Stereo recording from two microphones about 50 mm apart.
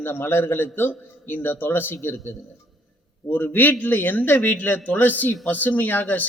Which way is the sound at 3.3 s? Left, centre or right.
Left.